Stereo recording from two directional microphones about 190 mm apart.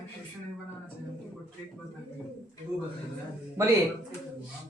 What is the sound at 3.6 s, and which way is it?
Speech, 15° right (ahead or behind).